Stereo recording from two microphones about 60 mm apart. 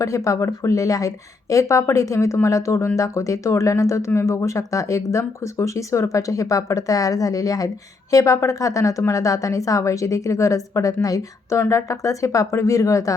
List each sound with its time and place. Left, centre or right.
0.0 s a woman's voice: left
8.1 s a woman's voice: left